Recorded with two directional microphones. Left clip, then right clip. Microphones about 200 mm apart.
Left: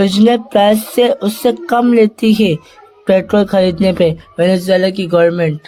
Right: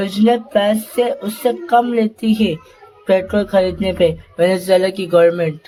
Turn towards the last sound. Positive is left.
turn(degrees=20)  # may be behind; listen again after turning